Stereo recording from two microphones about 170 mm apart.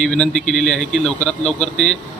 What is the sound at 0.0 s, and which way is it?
A man's voice, 5° left (ahead or behind).